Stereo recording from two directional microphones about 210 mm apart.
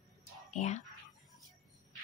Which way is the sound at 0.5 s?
35° left (ahead or behind).